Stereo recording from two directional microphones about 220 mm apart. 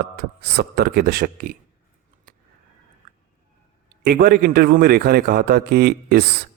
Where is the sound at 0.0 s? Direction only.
45° right (ahead or behind).